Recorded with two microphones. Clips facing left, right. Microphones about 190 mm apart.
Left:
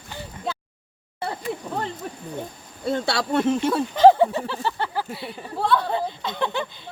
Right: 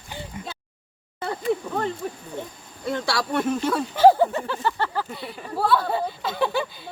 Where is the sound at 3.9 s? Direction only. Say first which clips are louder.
Left 1 dB; 5° right (ahead or behind).